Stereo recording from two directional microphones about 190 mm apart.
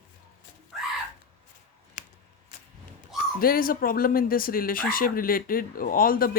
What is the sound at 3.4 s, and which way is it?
Speech, 50° left (ahead or behind).